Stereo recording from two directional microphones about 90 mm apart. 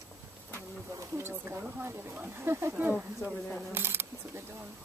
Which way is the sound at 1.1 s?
25° right (ahead or behind).